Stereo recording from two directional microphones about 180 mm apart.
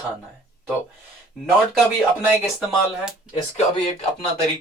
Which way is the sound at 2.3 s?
5° right (ahead or behind).